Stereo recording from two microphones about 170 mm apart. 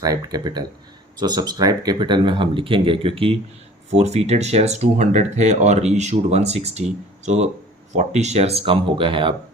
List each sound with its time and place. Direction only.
0.0 s speech: 20° right (ahead or behind)